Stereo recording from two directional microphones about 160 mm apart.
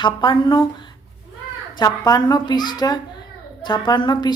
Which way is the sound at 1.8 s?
25° left (ahead or behind).